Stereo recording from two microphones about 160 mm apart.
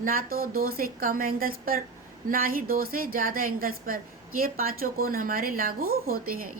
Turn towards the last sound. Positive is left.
turn(degrees=-65)  # may be behind; listen again after turning